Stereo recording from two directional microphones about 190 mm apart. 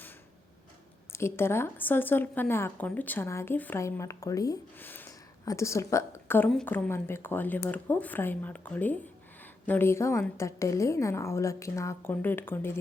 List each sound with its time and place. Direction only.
1.1 s speech: 15° left (ahead or behind)